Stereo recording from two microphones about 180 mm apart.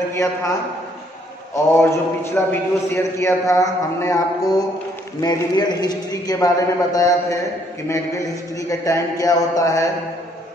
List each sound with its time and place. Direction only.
0.1 s a man's voice: 15° left (ahead or behind)
1.5 s a man's voice: 15° left (ahead or behind)
5.2 s a man's voice: 20° left (ahead or behind)
8.5 s a man's voice: 20° left (ahead or behind)